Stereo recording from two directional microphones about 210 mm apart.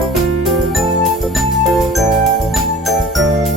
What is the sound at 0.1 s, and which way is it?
Music, centre (ahead or behind).